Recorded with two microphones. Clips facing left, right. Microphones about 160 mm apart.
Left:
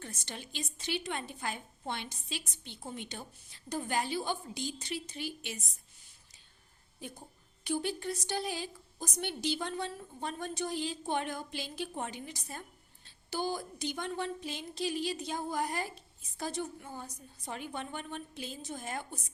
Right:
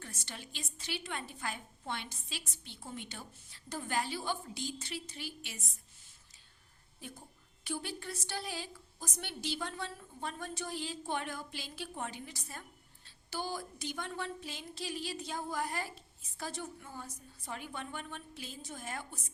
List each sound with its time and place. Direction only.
0.0 s a woman's voice: 20° left (ahead or behind)
7.6 s a woman's voice: 20° left (ahead or behind)